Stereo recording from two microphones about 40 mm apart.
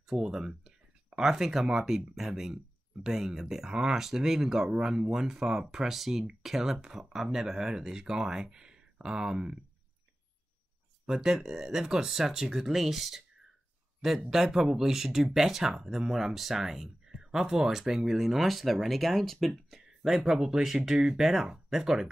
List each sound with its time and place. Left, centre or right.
0.1 s speech: centre
11.1 s speech: centre
14.3 s speech: centre
19.8 s a sound: centre
20.2 s speech: centre